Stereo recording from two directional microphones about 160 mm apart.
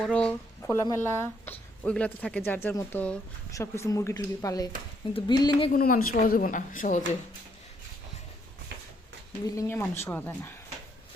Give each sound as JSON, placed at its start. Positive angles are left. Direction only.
{"t": 0.0, "sound": "speech", "side_deg": 5}
{"t": 5.7, "sound": "a woman's voice", "side_deg": 60}
{"t": 9.6, "sound": "speech", "side_deg": 15}